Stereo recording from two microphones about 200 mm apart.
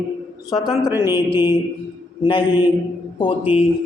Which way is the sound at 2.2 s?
25° left (ahead or behind).